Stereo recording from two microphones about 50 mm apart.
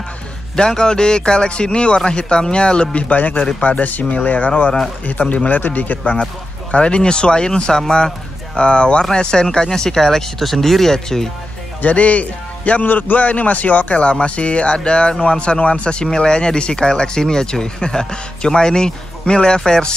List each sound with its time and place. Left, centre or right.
0.6 s a man's voice: centre
11.8 s a man's voice: left